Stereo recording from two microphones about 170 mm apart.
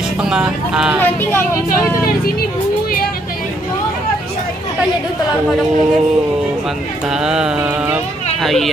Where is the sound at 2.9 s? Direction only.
60° left (ahead or behind).